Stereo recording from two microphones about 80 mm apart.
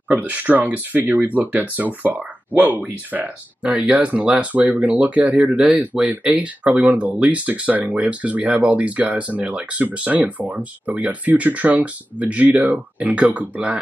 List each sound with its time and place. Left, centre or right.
0.1 s speech: right